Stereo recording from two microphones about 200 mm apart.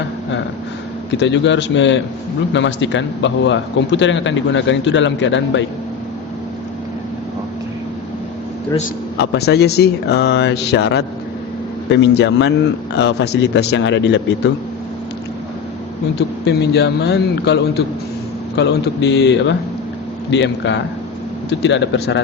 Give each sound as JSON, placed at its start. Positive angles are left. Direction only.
{"t": 1.2, "sound": "a man's voice", "side_deg": 65}
{"t": 9.1, "sound": "a man's voice", "side_deg": 55}
{"t": 16.1, "sound": "a man's voice", "side_deg": 55}